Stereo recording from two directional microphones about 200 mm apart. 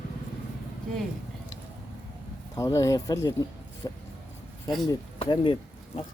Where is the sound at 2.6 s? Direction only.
15° left (ahead or behind).